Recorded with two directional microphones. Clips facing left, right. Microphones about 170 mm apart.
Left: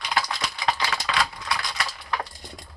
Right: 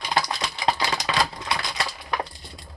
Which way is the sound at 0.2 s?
20° right (ahead or behind).